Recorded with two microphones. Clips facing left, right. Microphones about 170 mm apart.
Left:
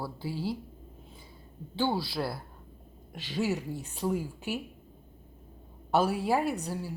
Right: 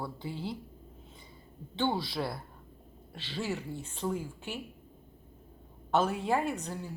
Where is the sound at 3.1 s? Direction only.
15° left (ahead or behind).